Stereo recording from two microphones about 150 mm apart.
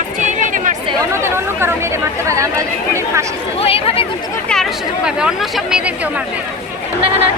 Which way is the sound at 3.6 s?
40° left (ahead or behind).